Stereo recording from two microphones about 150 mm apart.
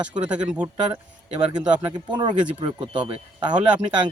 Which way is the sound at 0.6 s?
20° right (ahead or behind).